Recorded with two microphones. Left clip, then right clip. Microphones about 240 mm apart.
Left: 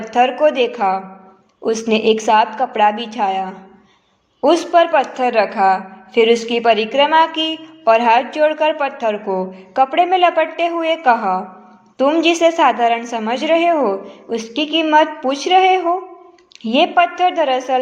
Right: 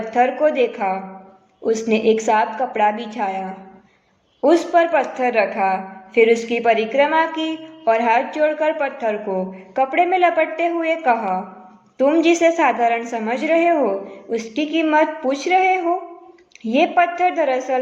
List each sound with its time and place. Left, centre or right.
0.0 s a woman's voice: centre